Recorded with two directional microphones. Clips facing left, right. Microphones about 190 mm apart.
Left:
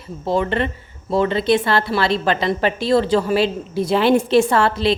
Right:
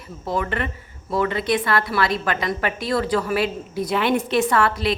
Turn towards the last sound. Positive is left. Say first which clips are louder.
# left 3 dB
turn(degrees=30)  # may be behind; listen again after turning